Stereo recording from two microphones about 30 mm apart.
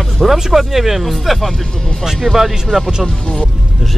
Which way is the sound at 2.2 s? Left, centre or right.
Centre.